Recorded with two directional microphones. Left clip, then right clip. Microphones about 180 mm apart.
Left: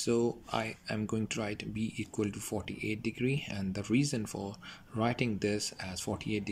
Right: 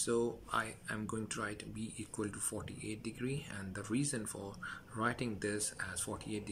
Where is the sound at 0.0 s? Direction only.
15° left (ahead or behind).